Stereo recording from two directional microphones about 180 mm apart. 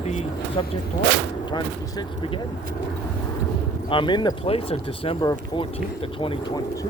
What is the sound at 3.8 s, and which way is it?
Speech, 25° left (ahead or behind).